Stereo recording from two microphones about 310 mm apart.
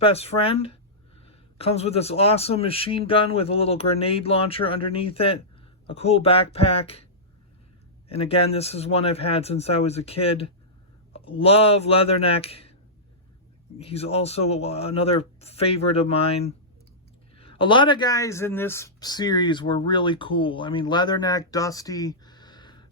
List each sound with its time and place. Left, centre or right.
0.0 s a man's voice: centre
13.7 s a man's voice: centre
17.3 s speech: centre